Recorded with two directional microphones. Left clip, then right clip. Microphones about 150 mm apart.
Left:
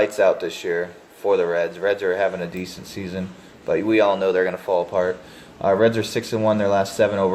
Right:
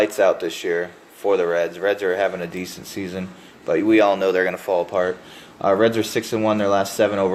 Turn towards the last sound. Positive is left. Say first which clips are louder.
# even
turn(degrees=-25)  # may be behind; listen again after turning